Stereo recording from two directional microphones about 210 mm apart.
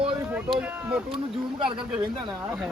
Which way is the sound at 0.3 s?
10° right (ahead or behind).